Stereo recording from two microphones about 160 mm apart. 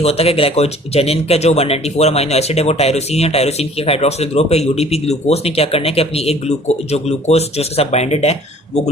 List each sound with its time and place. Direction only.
0.0 s speech: 40° left (ahead or behind)